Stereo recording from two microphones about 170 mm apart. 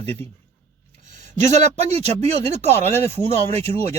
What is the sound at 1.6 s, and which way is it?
Speech, 40° right (ahead or behind).